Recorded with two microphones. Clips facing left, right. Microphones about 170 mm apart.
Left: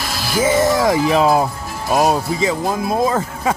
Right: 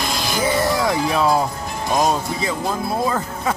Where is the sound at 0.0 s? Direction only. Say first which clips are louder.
Even; 5° left (ahead or behind).